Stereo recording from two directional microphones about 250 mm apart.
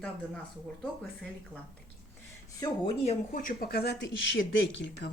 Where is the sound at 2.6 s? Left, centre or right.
Centre.